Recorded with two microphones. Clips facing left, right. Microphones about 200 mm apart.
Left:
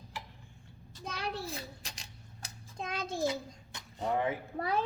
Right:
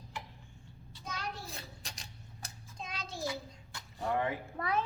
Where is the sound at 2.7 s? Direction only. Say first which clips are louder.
Left 7 dB; 55° left (ahead or behind).